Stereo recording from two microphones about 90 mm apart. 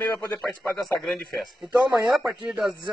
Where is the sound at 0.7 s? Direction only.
Centre (ahead or behind).